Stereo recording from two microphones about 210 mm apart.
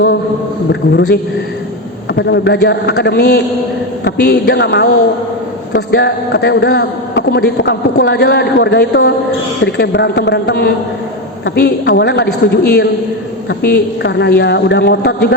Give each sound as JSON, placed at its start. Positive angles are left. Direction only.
{"t": 0.7, "sound": "speech", "side_deg": 55}